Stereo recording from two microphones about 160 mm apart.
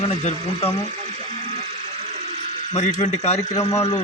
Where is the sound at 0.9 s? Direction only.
45° right (ahead or behind).